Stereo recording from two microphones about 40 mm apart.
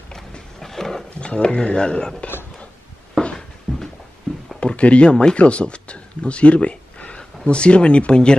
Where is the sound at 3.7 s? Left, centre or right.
Centre.